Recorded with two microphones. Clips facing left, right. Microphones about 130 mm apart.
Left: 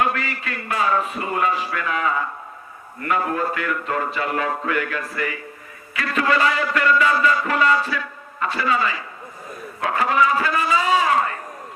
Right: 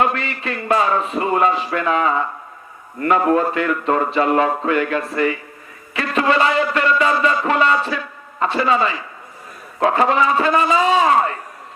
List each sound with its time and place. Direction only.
0.0 s a man's voice: 25° right (ahead or behind)